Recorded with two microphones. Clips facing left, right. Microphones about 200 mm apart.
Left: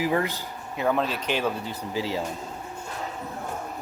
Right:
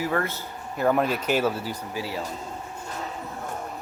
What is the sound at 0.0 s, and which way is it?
Speech, 15° left (ahead or behind).